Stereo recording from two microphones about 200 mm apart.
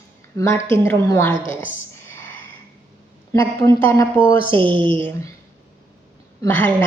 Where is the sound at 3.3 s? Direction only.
15° left (ahead or behind).